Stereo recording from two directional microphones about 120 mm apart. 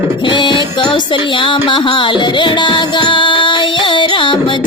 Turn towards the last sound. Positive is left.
turn(degrees=45)  # may be behind; listen again after turning